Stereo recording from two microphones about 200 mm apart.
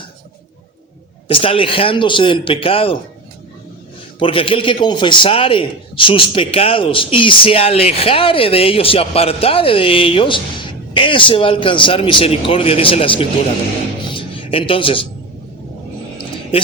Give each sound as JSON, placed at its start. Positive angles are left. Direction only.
{"t": 1.3, "sound": "a man's voice", "side_deg": 25}
{"t": 4.2, "sound": "a man's voice", "side_deg": 25}
{"t": 14.1, "sound": "a sound", "side_deg": 25}